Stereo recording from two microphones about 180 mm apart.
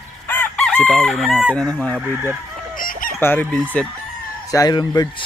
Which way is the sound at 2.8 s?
50° left (ahead or behind).